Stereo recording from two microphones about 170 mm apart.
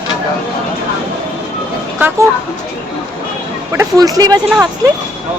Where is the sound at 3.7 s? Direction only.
20° right (ahead or behind).